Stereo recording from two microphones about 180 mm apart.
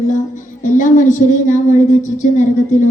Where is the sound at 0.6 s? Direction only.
45° left (ahead or behind).